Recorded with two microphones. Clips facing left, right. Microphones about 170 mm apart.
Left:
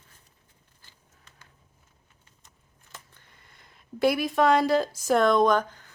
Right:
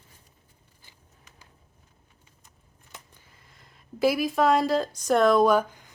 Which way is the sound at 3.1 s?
Centre (ahead or behind).